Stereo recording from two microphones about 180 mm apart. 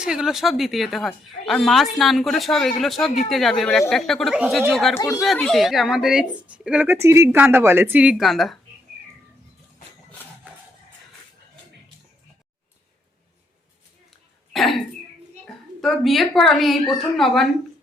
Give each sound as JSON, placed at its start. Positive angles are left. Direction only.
{"t": 0.0, "sound": "a woman's voice", "side_deg": -5}
{"t": 4.9, "sound": "speech", "side_deg": 15}
{"t": 5.2, "sound": "a woman's voice", "side_deg": 0}
{"t": 14.1, "sound": "throat clearing", "side_deg": 0}
{"t": 15.4, "sound": "a woman's voice", "side_deg": 0}